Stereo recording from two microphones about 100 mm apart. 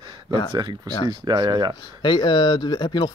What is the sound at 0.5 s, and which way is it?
Speech, 45° right (ahead or behind).